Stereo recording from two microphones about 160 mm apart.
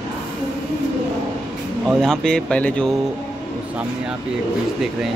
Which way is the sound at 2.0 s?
5° left (ahead or behind).